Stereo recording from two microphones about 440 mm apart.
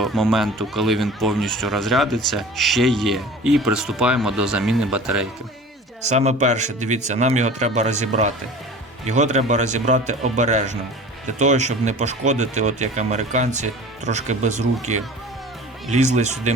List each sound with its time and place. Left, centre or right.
0.0 s speech: centre
6.0 s speech: centre